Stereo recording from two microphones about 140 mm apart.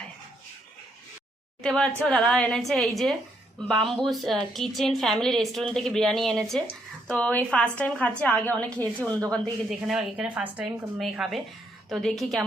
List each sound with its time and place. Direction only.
1.6 s a woman's voice: 5° left (ahead or behind)
9.0 s a woman's voice: 25° right (ahead or behind)
9.3 s a woman's voice: centre (ahead or behind)